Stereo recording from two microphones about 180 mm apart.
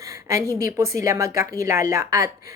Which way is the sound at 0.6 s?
15° right (ahead or behind).